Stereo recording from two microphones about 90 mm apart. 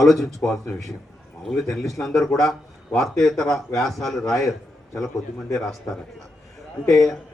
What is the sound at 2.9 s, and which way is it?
A man's voice, centre (ahead or behind).